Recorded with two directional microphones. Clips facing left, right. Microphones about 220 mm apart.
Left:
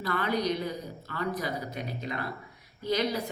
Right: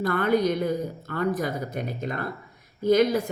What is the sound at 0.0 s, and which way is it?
A woman's voice, 50° right (ahead or behind).